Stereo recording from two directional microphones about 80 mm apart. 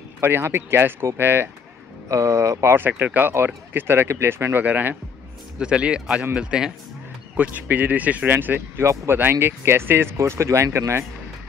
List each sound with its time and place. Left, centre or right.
0.2 s speech: right
2.0 s speech: right
2.7 s speech: right